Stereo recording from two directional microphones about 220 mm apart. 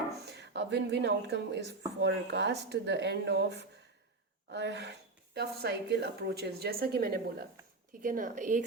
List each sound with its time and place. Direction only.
0.3 s a woman's voice: 50° right (ahead or behind)